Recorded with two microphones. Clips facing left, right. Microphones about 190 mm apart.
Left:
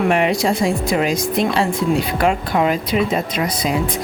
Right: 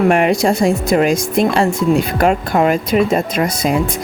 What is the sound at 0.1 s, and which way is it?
Speech, 50° right (ahead or behind).